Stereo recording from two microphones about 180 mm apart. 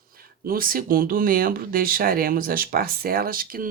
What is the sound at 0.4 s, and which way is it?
Speech, 50° right (ahead or behind).